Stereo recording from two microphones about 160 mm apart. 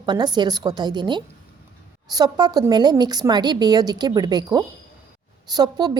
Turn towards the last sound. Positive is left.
turn(degrees=-25)  # may be behind; listen again after turning